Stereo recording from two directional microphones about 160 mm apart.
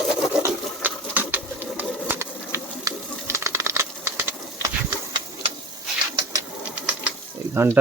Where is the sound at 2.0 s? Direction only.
15° right (ahead or behind).